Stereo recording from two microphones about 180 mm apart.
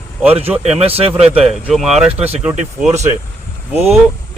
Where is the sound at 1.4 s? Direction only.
Centre (ahead or behind).